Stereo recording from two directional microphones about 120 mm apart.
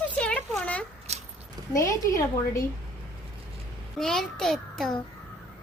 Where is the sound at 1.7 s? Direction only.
30° left (ahead or behind).